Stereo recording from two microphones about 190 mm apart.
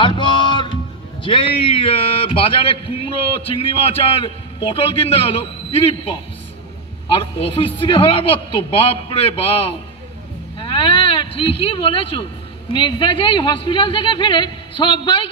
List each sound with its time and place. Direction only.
0.0 s music: 25° left (ahead or behind)
1.2 s a man's voice: 30° left (ahead or behind)
7.1 s a man's voice: 30° left (ahead or behind)